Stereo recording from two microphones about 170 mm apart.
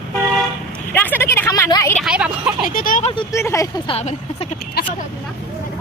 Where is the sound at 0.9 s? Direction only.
10° left (ahead or behind).